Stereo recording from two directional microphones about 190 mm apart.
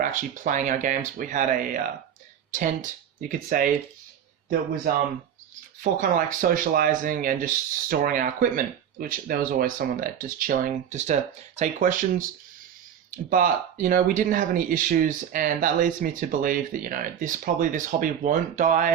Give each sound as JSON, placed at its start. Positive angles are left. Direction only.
{"t": 0.0, "sound": "speech", "side_deg": -40}
{"t": 3.2, "sound": "speech", "side_deg": -45}
{"t": 4.9, "sound": "speech", "side_deg": -50}
{"t": 13.3, "sound": "speech", "side_deg": -45}